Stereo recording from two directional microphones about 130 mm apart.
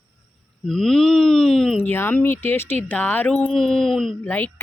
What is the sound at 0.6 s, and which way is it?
Speech, 5° left (ahead or behind).